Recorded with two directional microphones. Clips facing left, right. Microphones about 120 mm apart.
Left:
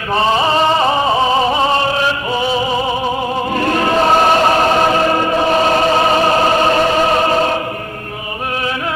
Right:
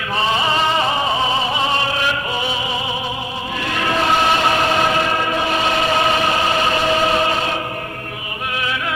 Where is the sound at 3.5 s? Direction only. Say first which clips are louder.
Left 5 dB; 45° left (ahead or behind).